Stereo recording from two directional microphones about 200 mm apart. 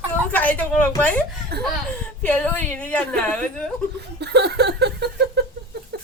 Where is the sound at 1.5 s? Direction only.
50° right (ahead or behind).